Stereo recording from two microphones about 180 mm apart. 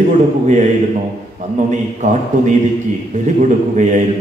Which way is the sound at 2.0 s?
40° right (ahead or behind).